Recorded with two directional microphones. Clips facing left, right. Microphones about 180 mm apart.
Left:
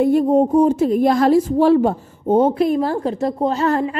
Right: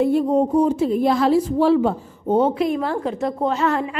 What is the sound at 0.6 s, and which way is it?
A woman's voice, 45° left (ahead or behind).